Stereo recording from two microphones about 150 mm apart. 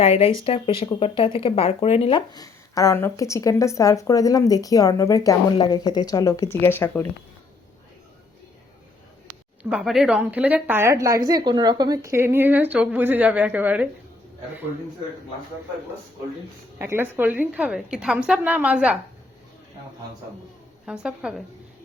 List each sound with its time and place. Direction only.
0.0 s speech: 40° left (ahead or behind); by 7.1 s 15° left (ahead or behind)
9.6 s speech: 5° right (ahead or behind)
16.7 s speech: 15° right (ahead or behind)
20.8 s a woman's voice: 5° right (ahead or behind)